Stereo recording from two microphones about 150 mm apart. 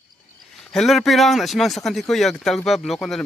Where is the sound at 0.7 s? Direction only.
Centre (ahead or behind).